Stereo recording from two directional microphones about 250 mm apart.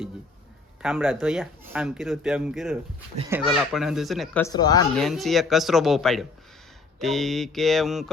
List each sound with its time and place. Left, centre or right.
0.8 s speech: centre
4.4 s speech: centre
4.9 s speech: centre